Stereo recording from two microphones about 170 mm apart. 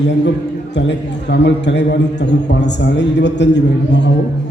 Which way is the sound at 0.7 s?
90° left.